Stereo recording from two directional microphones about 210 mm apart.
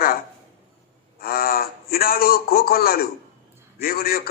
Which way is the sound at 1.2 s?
45° left (ahead or behind).